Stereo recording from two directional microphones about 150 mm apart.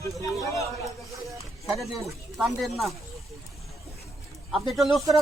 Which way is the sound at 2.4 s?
Centre (ahead or behind).